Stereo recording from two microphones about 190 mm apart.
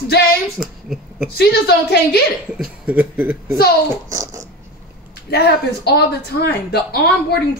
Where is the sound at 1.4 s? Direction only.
55° left (ahead or behind).